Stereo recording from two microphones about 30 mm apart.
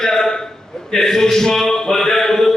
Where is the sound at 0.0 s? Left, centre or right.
Centre.